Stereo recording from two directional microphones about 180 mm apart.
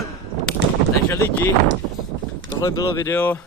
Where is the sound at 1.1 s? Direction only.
10° left (ahead or behind).